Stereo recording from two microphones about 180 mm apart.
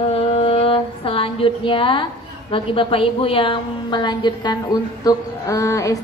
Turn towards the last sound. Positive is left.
turn(degrees=15)  # may be behind; listen again after turning